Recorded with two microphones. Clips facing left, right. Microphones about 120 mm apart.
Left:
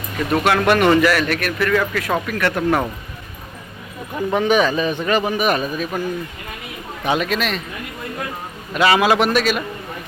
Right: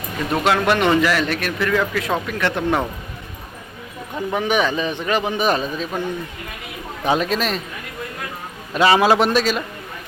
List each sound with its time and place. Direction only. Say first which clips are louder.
0.4 s a man's voice: left 2 dB; 20° right (ahead or behind)
4.4 s a man's voice: left 3 dB; 15° right (ahead or behind)
7.0 s a man's voice: right 1 dB; 35° right (ahead or behind)
8.7 s a man's voice: right 1 dB; 30° right (ahead or behind)